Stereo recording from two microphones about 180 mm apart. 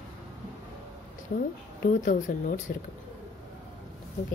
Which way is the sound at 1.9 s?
45° left (ahead or behind).